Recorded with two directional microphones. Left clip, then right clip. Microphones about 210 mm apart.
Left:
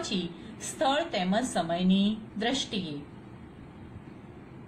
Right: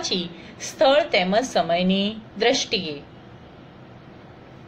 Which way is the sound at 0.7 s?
20° right (ahead or behind).